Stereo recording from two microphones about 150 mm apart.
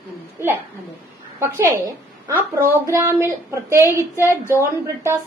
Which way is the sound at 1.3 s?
15° right (ahead or behind).